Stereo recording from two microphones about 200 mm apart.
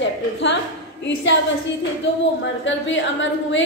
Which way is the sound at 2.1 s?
65° left (ahead or behind).